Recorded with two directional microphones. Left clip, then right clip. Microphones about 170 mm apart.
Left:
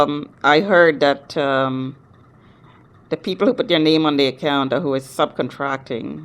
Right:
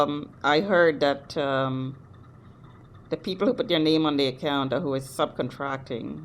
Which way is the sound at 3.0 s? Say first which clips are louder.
Left 7 dB; 20° left (ahead or behind).